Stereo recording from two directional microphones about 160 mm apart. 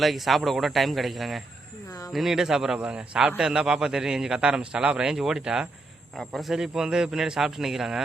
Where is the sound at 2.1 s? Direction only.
Centre (ahead or behind).